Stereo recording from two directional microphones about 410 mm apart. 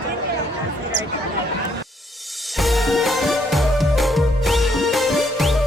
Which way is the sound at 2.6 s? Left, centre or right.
Centre.